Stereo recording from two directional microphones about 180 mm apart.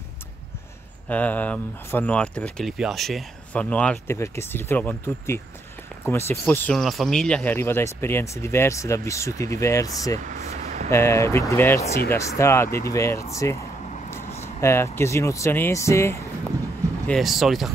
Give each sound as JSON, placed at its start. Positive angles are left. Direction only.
{"t": 1.0, "sound": "speech", "side_deg": 10}
{"t": 10.1, "sound": "vehicle", "side_deg": -40}
{"t": 10.9, "sound": "speech", "side_deg": 15}
{"t": 17.1, "sound": "speech", "side_deg": 0}